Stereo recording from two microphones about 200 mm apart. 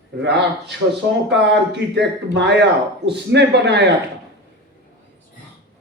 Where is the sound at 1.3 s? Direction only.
60° right (ahead or behind).